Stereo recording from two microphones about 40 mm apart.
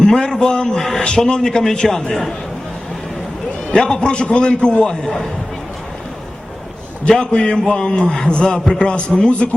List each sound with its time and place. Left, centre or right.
0.0 s a man's voice: centre
3.7 s a man's voice: centre
5.0 s a man's voice: centre
7.2 s a man's voice: left
8.6 s a man's voice: centre
8.9 s a man's voice: left